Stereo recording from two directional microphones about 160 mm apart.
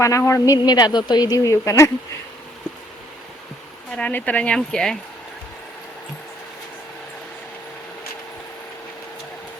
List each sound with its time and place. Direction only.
0.0 s speech: 20° left (ahead or behind)
3.9 s speech: 10° left (ahead or behind)